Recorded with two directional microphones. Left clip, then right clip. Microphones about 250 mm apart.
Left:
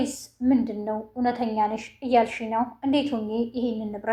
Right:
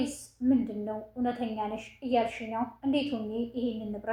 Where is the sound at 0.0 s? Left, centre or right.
Left.